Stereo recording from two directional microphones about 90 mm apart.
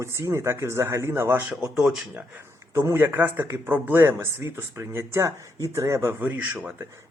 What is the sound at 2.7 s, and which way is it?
Speech, 30° right (ahead or behind).